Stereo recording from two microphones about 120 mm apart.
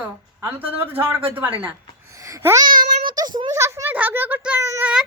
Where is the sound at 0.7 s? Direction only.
15° right (ahead or behind).